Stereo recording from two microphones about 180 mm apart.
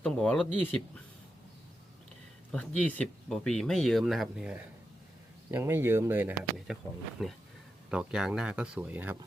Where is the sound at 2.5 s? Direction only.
5° left (ahead or behind); by 9.1 s 10° right (ahead or behind).